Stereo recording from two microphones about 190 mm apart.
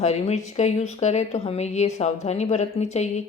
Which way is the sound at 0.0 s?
35° left (ahead or behind).